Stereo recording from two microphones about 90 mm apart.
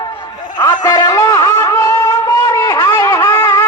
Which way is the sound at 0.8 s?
40° left (ahead or behind).